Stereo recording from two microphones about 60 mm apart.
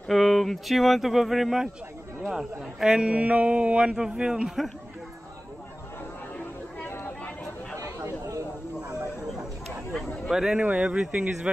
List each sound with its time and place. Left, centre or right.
0.1 s a man's voice: centre
6.9 s a sound: left
7.7 s chatter: right
10.3 s a man's voice: centre
10.6 s a man's voice: centre